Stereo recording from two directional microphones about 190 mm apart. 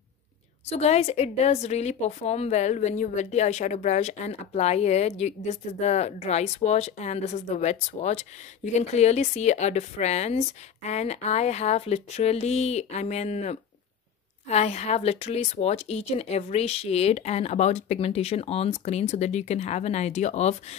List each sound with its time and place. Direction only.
0.7 s a woman's voice: 35° left (ahead or behind)